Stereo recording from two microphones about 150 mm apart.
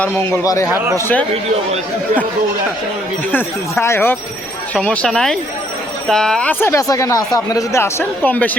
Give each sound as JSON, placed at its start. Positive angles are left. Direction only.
{"t": 0.4, "sound": "speech", "side_deg": 20}
{"t": 3.3, "sound": "speech", "side_deg": 15}